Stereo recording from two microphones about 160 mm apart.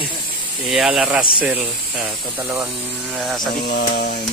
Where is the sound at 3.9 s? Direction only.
55° left (ahead or behind).